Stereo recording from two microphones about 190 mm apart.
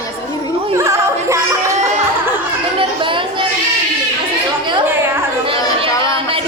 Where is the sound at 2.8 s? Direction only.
25° right (ahead or behind).